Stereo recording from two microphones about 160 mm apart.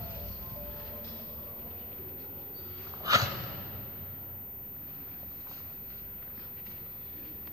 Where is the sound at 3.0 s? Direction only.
20° right (ahead or behind).